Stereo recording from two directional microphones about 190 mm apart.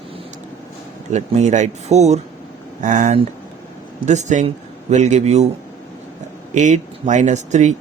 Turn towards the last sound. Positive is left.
turn(degrees=-40)  # may be behind; listen again after turning